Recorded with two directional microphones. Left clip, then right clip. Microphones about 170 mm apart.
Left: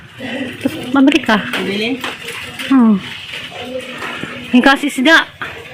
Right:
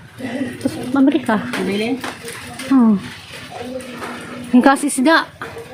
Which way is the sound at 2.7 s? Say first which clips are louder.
Left 2 dB; 10° left (ahead or behind).